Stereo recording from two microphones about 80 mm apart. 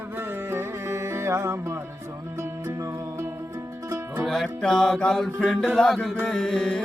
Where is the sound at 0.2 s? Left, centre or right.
Right.